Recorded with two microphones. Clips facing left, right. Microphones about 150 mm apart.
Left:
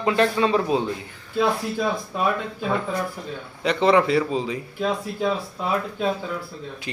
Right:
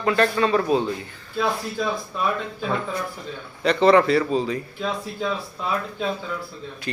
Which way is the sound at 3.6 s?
15° left (ahead or behind).